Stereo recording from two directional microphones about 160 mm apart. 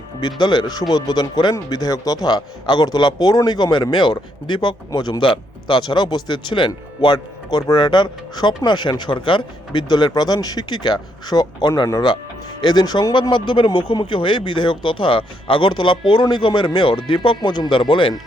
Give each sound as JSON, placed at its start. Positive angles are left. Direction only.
{"t": 0.2, "sound": "speech", "side_deg": 30}